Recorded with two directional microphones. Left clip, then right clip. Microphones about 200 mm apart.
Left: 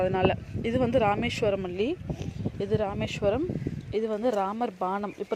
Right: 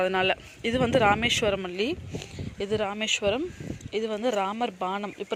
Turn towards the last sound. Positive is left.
turn(degrees=10)  # may be behind; listen again after turning